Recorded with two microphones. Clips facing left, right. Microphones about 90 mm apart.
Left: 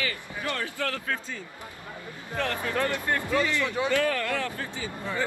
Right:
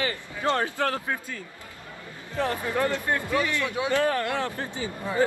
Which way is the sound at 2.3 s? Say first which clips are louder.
Right 2 dB; 20° right (ahead or behind).